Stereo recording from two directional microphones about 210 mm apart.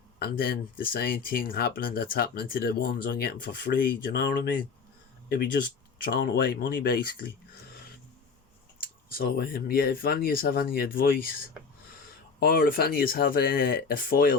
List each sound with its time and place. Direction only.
0.2 s speech: 45° left (ahead or behind)
6.1 s speech: 45° left (ahead or behind)
8.8 s speech: 45° left (ahead or behind)